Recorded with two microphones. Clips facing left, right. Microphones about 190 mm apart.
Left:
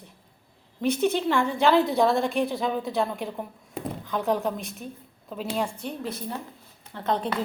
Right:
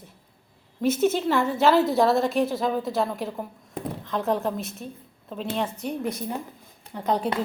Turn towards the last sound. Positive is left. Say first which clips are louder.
# right 2 dB
turn(degrees=-15)  # may be behind; listen again after turning